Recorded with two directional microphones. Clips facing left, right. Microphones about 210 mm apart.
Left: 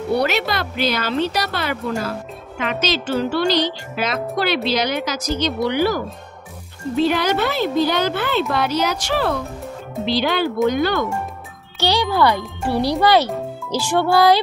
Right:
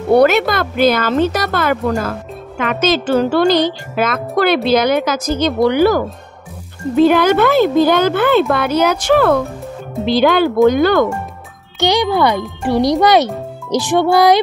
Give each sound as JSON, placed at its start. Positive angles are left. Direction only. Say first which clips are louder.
{"t": 0.1, "sound": "speech", "louder": "right 9 dB", "side_deg": -50}
{"t": 11.8, "sound": "a child's voice", "louder": "right 4 dB", "side_deg": -20}